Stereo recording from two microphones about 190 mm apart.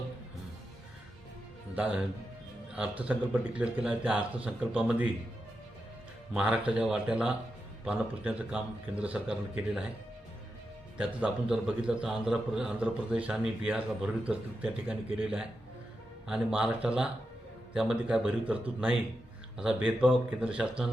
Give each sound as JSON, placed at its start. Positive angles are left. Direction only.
{"t": 1.7, "sound": "a man's voice", "side_deg": -5}
{"t": 6.3, "sound": "a man's voice", "side_deg": -5}
{"t": 10.9, "sound": "a man's voice", "side_deg": -5}